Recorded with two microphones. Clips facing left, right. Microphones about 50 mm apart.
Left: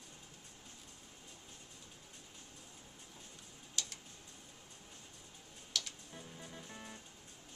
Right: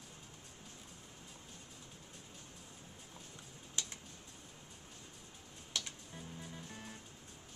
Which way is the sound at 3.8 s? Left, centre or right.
Right.